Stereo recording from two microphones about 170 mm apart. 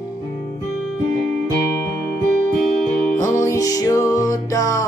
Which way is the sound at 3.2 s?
20° left (ahead or behind).